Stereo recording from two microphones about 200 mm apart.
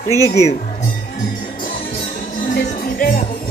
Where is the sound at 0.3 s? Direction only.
30° left (ahead or behind).